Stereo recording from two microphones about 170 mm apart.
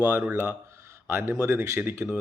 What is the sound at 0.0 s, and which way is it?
A man's voice, 15° right (ahead or behind).